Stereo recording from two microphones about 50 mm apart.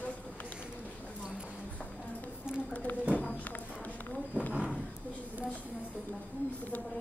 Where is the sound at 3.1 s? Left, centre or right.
Left.